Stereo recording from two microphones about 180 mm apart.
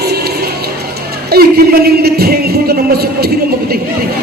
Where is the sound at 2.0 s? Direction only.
60° right (ahead or behind).